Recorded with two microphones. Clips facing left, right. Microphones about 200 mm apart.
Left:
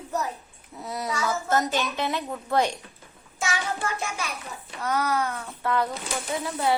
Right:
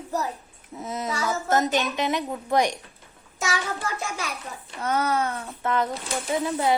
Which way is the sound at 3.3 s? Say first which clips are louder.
Even; 35° right (ahead or behind).